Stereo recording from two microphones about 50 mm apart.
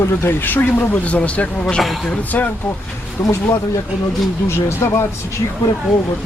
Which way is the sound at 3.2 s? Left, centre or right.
Left.